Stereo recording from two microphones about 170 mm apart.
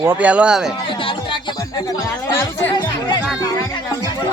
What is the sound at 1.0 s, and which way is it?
Speech, 30° left (ahead or behind).